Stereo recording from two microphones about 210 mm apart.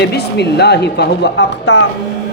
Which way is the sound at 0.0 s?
50° left (ahead or behind).